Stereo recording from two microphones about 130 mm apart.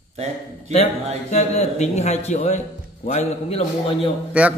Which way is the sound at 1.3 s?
60° left (ahead or behind).